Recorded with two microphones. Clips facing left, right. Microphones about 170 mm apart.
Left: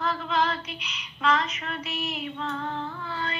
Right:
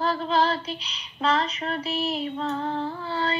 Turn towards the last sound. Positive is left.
turn(degrees=-30)  # may be behind; listen again after turning